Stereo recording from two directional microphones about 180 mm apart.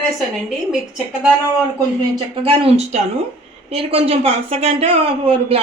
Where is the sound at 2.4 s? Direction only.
30° right (ahead or behind).